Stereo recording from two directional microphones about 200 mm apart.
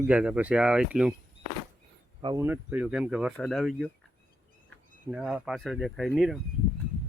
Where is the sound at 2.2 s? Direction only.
25° right (ahead or behind).